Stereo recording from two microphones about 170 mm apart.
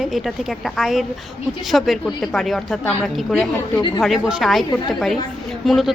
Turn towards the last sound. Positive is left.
turn(degrees=0)  # may be behind; listen again after turning